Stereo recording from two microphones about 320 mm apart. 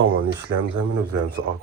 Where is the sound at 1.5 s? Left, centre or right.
Right.